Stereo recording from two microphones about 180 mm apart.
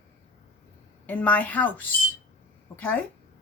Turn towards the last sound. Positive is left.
turn(degrees=10)  # may be behind; listen again after turning